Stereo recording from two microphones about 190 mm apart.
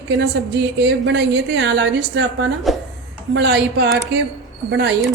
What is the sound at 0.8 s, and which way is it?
A woman's voice, 65° right (ahead or behind).